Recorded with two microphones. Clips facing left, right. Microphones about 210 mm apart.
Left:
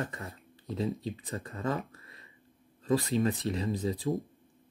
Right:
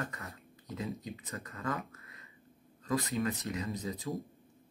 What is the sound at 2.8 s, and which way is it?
Speech, 30° left (ahead or behind).